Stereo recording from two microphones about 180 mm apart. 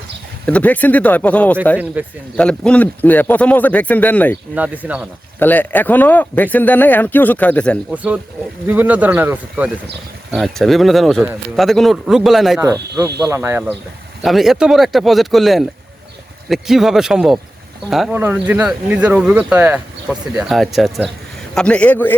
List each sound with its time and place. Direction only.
0.4 s speech: 10° left (ahead or behind)
2.0 s speech: 10° right (ahead or behind)
2.3 s speech: 5° left (ahead or behind)
4.5 s speech: 10° right (ahead or behind)
5.4 s speech: 10° left (ahead or behind)
7.9 s speech: 10° right (ahead or behind)
10.3 s speech: centre (ahead or behind)
12.6 s speech: 20° right (ahead or behind)
14.2 s speech: centre (ahead or behind)